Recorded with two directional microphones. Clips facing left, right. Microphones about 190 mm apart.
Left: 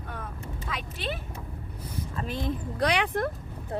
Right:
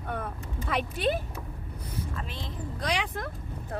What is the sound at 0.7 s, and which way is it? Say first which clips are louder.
Speech: right 8 dB; 60° right (ahead or behind).